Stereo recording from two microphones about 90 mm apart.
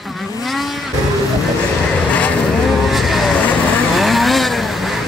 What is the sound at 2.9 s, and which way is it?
Vehicle, centre (ahead or behind).